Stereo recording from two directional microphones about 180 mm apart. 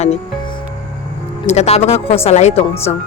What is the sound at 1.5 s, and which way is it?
Speech, 35° left (ahead or behind).